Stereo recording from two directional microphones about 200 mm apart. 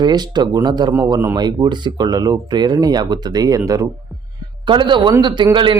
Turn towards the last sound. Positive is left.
turn(degrees=-25)  # may be behind; listen again after turning